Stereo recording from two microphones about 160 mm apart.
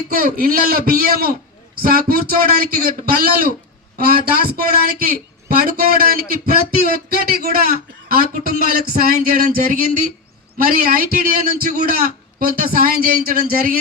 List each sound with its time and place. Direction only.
0.1 s speech: 65° right (ahead or behind)
10.6 s a man's voice: 65° right (ahead or behind)